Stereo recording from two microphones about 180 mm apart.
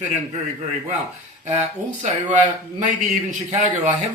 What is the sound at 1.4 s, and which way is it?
Speech, 40° right (ahead or behind).